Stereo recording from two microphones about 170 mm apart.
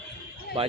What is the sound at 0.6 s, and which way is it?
Speech, 35° right (ahead or behind).